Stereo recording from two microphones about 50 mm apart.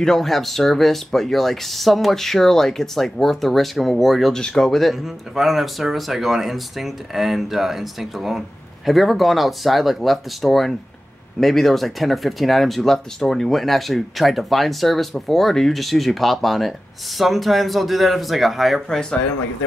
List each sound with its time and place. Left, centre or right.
0.0 s speech: centre
4.3 s speech: centre
4.6 s speech: centre
18.9 s speech: centre